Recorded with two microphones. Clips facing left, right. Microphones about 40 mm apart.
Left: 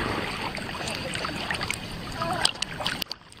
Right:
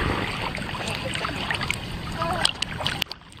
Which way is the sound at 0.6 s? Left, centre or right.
Right.